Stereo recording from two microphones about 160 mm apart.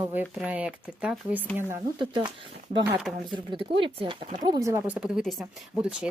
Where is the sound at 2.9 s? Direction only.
5° right (ahead or behind).